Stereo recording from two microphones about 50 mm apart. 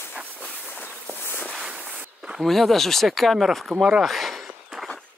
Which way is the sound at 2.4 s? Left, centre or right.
Centre.